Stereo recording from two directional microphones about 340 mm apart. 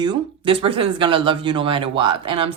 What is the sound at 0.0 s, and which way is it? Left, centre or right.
Speech, centre.